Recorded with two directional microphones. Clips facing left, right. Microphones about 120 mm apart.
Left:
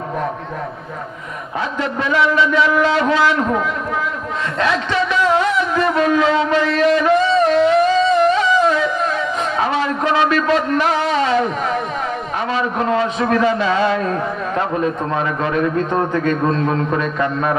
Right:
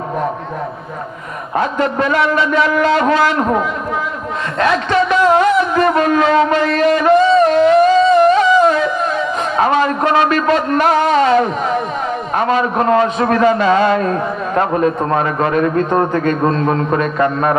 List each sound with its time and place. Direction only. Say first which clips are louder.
1.5 s a man's voice: right 6 dB; 50° right (ahead or behind)
4.5 s music: right 5 dB; 50° right (ahead or behind)
9.6 s a sound: right 6 dB; 50° right (ahead or behind)
12.3 s a man's voice: right 7 dB; 50° right (ahead or behind)